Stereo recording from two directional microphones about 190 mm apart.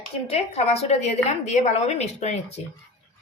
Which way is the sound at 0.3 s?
35° left (ahead or behind).